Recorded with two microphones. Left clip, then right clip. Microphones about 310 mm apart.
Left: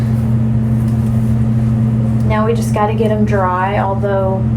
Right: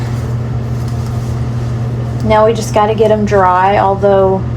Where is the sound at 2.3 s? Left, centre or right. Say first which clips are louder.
Right 8 dB; right.